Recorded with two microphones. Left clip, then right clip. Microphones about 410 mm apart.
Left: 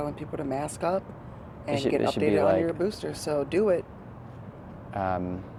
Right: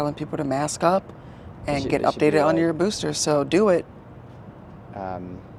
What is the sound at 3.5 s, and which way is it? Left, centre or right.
Speech, right.